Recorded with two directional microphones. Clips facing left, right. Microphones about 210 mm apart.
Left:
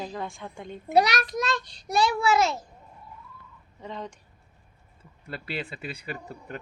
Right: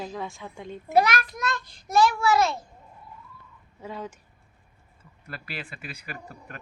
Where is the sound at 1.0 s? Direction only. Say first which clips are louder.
Left 1 dB; 75° left (ahead or behind).